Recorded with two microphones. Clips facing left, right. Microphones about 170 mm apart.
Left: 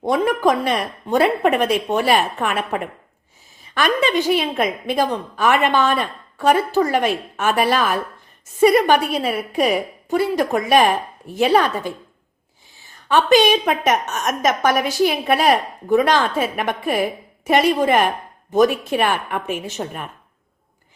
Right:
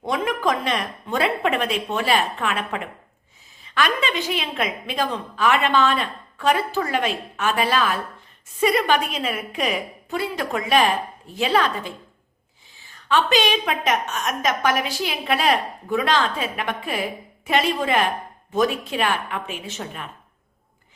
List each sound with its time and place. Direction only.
0.1 s a woman's voice: 35° left (ahead or behind)
13.1 s a woman's voice: 40° left (ahead or behind)